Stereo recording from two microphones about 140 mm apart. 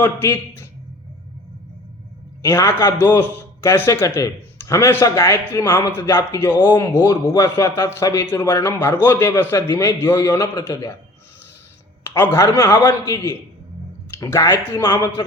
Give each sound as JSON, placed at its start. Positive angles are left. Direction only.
{"t": 0.0, "sound": "a man's voice", "side_deg": 15}
{"t": 2.4, "sound": "a man's voice", "side_deg": 20}
{"t": 12.0, "sound": "a man's voice", "side_deg": 15}